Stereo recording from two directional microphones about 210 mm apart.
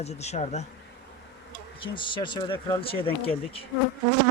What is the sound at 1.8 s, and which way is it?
Speech, 25° left (ahead or behind).